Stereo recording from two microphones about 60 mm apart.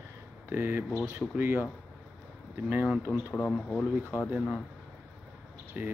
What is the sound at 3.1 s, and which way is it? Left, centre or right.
Speech, centre.